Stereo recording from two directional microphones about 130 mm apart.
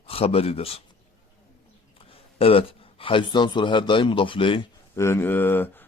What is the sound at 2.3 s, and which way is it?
A man's voice, 45° left (ahead or behind).